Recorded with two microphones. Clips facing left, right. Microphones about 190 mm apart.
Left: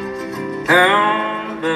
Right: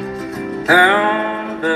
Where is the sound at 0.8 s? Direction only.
50° right (ahead or behind).